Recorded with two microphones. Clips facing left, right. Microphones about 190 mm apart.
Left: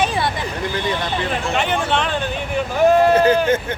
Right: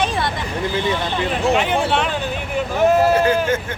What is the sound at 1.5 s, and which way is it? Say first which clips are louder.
Speech: right 2 dB; 5° right (ahead or behind).